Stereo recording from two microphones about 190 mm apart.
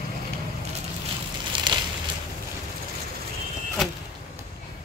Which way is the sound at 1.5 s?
25° right (ahead or behind).